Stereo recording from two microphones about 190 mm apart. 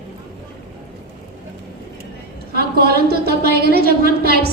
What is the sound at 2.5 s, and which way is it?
A woman's voice, 55° right (ahead or behind).